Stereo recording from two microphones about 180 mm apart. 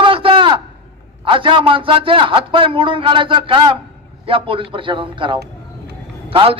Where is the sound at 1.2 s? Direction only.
30° right (ahead or behind).